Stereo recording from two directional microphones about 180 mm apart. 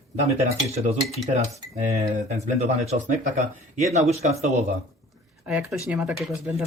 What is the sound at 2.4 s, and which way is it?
Speech, 40° right (ahead or behind).